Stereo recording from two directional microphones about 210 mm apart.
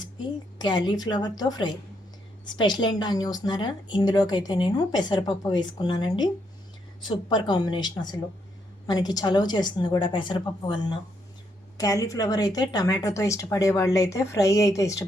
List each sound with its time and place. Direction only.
0.6 s a woman's voice: 20° left (ahead or behind)